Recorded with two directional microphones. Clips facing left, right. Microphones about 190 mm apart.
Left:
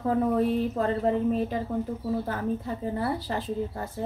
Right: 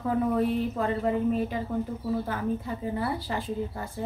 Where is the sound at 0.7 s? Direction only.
35° left (ahead or behind).